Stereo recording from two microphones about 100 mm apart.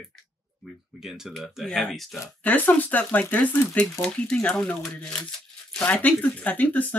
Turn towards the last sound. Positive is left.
turn(degrees=15)  # may be behind; listen again after turning